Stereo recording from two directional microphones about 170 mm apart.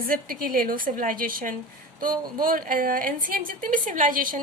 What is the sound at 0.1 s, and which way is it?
A woman's voice, 55° right (ahead or behind).